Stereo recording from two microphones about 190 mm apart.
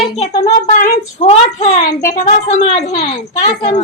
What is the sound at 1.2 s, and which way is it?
A woman's voice, 35° left (ahead or behind).